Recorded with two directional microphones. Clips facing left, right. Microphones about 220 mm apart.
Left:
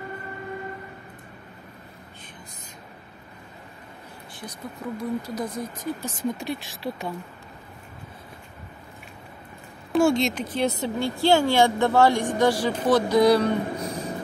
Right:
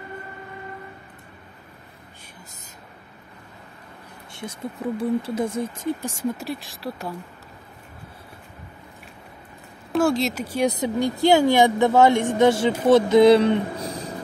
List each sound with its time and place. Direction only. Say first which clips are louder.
4.3 s a woman's voice: right 5 dB; 25° right (ahead or behind)
6.0 s speech: right 1 dB; 5° right (ahead or behind)
9.9 s a woman's voice: even; centre (ahead or behind); by 14.0 s 25° right (ahead or behind)